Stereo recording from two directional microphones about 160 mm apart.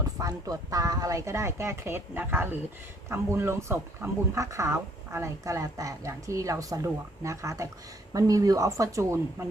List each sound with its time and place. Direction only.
0.2 s speech: 20° right (ahead or behind)